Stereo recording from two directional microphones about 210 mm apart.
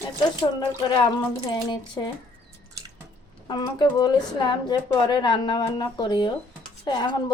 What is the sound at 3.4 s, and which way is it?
Speech, 20° left (ahead or behind).